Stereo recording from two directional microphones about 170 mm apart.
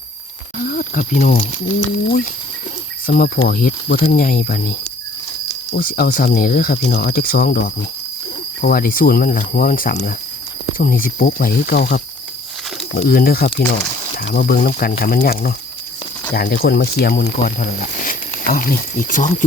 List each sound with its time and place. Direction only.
0.6 s speech: 55° left (ahead or behind)
3.1 s speech: 60° left (ahead or behind)
5.7 s speech: 60° left (ahead or behind)
8.6 s speech: 55° left (ahead or behind)
17.6 s speech: 55° left (ahead or behind)